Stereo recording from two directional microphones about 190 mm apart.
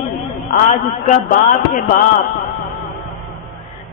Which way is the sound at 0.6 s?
40° left (ahead or behind).